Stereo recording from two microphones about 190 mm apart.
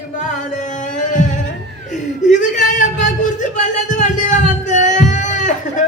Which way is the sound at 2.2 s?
40° left (ahead or behind).